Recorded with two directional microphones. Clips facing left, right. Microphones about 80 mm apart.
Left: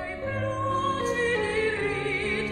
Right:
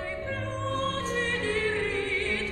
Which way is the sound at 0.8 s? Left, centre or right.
Centre.